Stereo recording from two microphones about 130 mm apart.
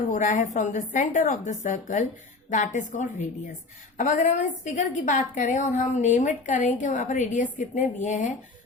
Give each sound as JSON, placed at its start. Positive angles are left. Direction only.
{"t": 0.1, "sound": "a woman's voice", "side_deg": 90}
{"t": 2.5, "sound": "a woman's voice", "side_deg": 75}